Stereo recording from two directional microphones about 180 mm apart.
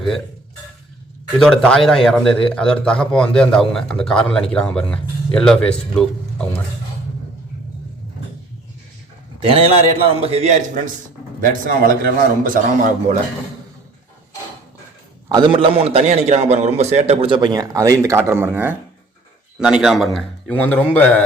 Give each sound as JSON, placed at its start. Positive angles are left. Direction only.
{"t": 1.4, "sound": "a man's voice", "side_deg": 5}
{"t": 10.1, "sound": "a man's voice", "side_deg": -35}
{"t": 11.3, "sound": "a man's voice", "side_deg": -50}
{"t": 15.3, "sound": "a man's voice", "side_deg": -25}